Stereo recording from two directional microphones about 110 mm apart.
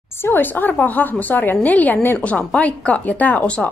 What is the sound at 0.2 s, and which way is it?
A woman's voice, 20° left (ahead or behind).